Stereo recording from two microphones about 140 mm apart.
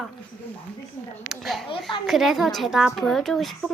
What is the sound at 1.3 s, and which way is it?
A woman's voice, centre (ahead or behind).